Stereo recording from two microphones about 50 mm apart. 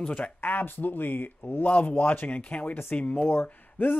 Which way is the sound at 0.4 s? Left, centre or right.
Left.